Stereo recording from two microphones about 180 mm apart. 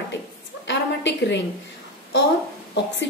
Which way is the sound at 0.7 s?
75° left (ahead or behind).